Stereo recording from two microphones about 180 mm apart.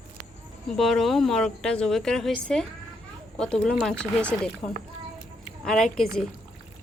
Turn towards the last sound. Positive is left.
turn(degrees=5)  # may be behind; listen again after turning